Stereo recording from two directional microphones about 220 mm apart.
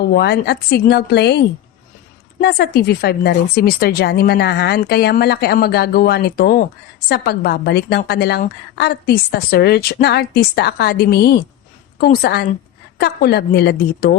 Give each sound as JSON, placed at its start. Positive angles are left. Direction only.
{"t": 0.0, "sound": "speech", "side_deg": 45}
{"t": 2.4, "sound": "speech", "side_deg": 45}